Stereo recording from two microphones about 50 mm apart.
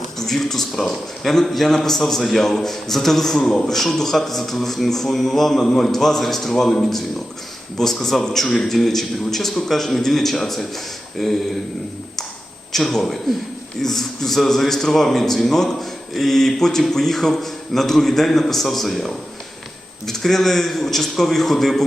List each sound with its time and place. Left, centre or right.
0.2 s a man's voice: centre
12.7 s a man's voice: centre